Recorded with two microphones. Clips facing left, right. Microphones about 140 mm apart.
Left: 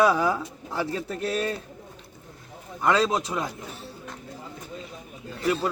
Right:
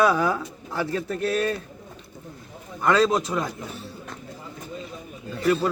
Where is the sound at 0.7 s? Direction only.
25° left (ahead or behind).